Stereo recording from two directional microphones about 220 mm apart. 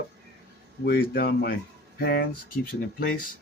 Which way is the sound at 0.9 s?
45° left (ahead or behind).